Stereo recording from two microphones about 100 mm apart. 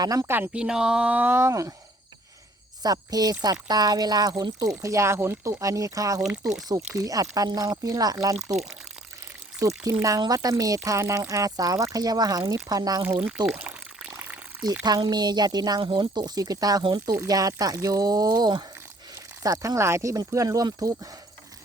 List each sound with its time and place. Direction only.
0.0 s speech: 40° right (ahead or behind)
0.3 s speech: 20° right (ahead or behind)
0.6 s speech: 5° right (ahead or behind); by 1.7 s 30° right (ahead or behind)
2.8 s speech: 40° right (ahead or behind)
6.1 s speech: 5° right (ahead or behind)
6.9 s speech: 35° right (ahead or behind)
9.6 s speech: 30° right (ahead or behind)
13.1 s water: 20° right (ahead or behind)
14.8 s speech: 45° right (ahead or behind)